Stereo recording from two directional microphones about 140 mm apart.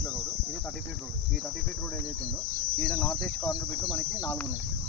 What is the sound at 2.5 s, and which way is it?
Cricket, 90° right.